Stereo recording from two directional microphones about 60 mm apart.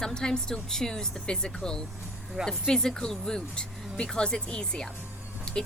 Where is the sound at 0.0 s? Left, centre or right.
Centre.